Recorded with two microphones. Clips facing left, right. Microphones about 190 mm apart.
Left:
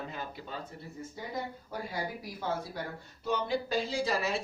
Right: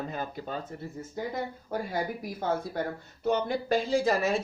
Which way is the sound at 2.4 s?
50° right (ahead or behind).